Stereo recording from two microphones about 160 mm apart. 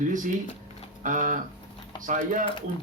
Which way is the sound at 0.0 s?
55° right (ahead or behind).